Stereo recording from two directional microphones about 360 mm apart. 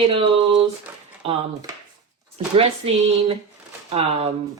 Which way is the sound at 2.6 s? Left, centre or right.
Centre.